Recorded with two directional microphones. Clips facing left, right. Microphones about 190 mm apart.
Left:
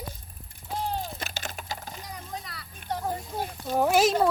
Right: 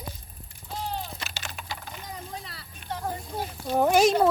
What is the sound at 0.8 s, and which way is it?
Typing, 45° left (ahead or behind).